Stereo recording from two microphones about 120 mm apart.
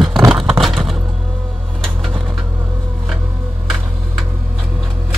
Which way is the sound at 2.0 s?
10° right (ahead or behind).